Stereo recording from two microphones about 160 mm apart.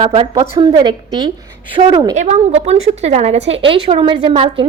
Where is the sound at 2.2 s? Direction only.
45° right (ahead or behind).